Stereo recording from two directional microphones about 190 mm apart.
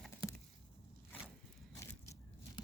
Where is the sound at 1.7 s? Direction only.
15° left (ahead or behind).